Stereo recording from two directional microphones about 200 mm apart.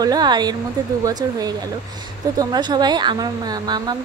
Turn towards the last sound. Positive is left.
turn(degrees=-20)  # may be behind; listen again after turning